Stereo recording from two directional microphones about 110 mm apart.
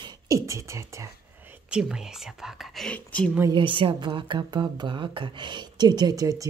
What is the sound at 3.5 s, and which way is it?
A woman's voice, 50° right (ahead or behind).